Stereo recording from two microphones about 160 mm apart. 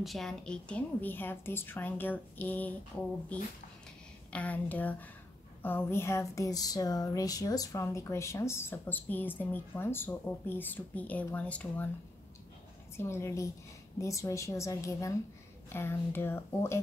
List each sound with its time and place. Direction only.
0.0 s speech: centre (ahead or behind)
4.3 s speech: 10° left (ahead or behind)
12.9 s speech: 15° left (ahead or behind)